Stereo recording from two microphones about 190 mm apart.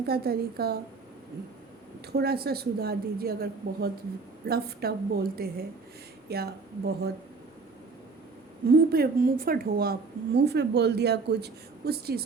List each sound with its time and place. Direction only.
0.0 s a woman's voice: 55° right (ahead or behind)
2.1 s a woman's voice: 55° right (ahead or behind)
8.9 s a woman's voice: 50° right (ahead or behind)